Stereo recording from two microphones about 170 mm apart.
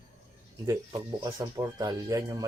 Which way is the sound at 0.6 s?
20° right (ahead or behind).